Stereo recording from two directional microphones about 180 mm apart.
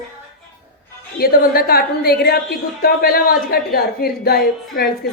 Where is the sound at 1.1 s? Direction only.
55° left (ahead or behind).